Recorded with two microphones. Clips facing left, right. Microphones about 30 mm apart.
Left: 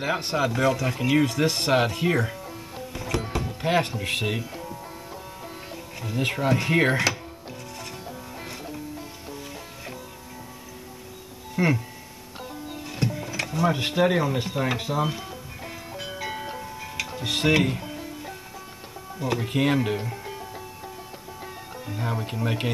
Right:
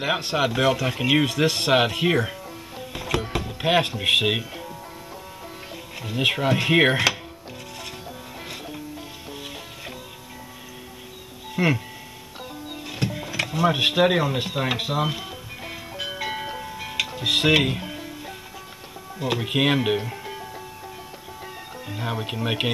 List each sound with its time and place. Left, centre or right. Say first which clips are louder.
0.2 s speech: right 2 dB; right
2.9 s music: right 3 dB; right
4.0 s speech: right 7 dB; right
5.9 s speech: right 4 dB; right
11.5 s speech: right 1 dB; right
12.7 s music: right 1 dB; right
13.0 s a sound: right 1 dB; right
16.0 s music: right 4 dB; right
17.6 s music: right 2 dB; right
19.1 s speech: right 2 dB; right
20.0 s music: right 2 dB; centre
21.8 s speech: right 1 dB; right